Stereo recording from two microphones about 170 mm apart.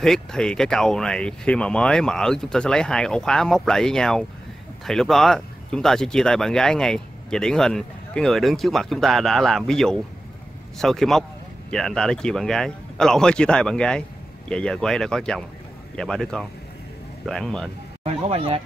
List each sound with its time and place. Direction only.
0.0 s speech: 5° left (ahead or behind)
18.0 s speech: 35° right (ahead or behind)